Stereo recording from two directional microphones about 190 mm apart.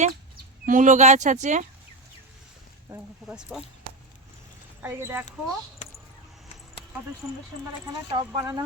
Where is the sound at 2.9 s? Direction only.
5° right (ahead or behind).